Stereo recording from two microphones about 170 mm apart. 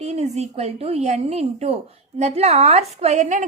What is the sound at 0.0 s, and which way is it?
A woman's voice, 40° right (ahead or behind).